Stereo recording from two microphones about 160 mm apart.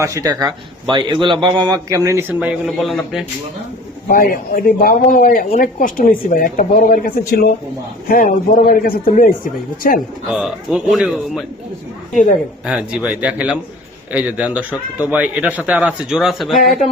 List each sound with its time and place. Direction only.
0.0 s a man's voice: 20° right (ahead or behind); by 3.2 s centre (ahead or behind)
4.1 s speech: 60° left (ahead or behind)
10.2 s speech: 5° right (ahead or behind)
12.6 s speech: 5° right (ahead or behind)